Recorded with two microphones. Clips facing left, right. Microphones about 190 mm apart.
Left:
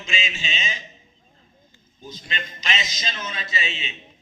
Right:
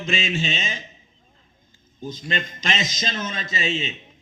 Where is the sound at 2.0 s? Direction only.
50° right (ahead or behind).